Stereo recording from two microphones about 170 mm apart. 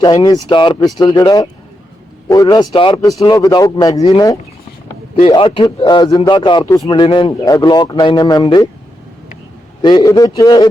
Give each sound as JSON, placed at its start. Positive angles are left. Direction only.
{"t": 0.0, "sound": "a man's voice", "side_deg": 25}
{"t": 9.8, "sound": "a man's voice", "side_deg": 25}